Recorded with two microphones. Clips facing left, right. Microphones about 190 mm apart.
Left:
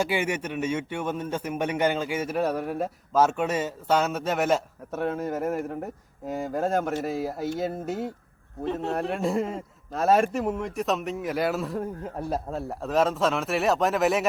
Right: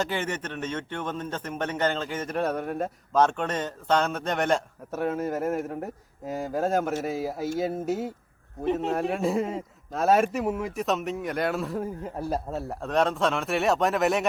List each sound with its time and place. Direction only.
0.0 s a man's voice: 10° left (ahead or behind)
8.6 s speech: 20° right (ahead or behind)
8.9 s a man's voice: centre (ahead or behind)